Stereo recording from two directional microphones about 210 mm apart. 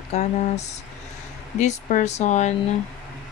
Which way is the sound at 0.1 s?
35° left (ahead or behind).